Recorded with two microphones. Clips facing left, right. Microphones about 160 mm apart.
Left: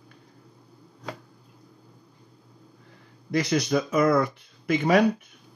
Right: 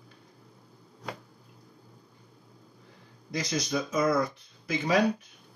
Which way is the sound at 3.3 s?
65° left (ahead or behind).